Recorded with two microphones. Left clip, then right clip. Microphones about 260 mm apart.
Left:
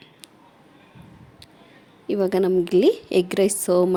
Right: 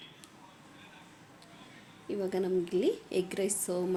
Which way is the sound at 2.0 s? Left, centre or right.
Left.